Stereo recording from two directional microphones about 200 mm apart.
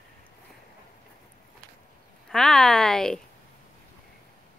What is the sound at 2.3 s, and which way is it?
Speech, centre (ahead or behind).